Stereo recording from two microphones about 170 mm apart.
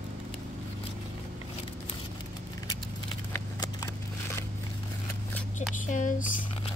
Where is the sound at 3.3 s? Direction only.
15° left (ahead or behind).